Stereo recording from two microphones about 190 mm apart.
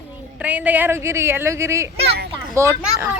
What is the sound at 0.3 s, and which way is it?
A woman's voice, 10° right (ahead or behind).